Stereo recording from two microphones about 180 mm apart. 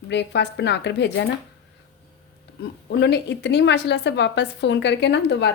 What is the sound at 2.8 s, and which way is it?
A woman's voice, 70° left (ahead or behind).